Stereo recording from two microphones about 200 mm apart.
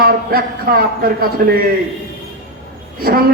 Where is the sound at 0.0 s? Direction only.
50° right (ahead or behind).